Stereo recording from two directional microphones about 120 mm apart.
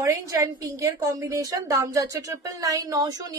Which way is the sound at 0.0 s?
25° right (ahead or behind).